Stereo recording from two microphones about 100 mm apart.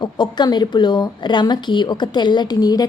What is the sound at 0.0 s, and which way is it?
A woman's voice, 45° left (ahead or behind).